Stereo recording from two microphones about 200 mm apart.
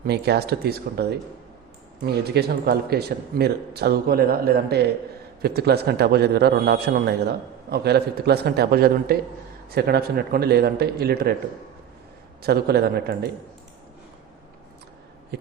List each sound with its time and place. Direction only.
0.0 s a man's voice: 55° right (ahead or behind)
12.4 s a man's voice: 50° right (ahead or behind)
15.3 s a sound: 55° right (ahead or behind)